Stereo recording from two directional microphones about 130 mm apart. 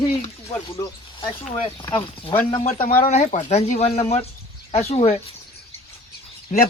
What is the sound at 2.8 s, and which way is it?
Speech, 75° left (ahead or behind).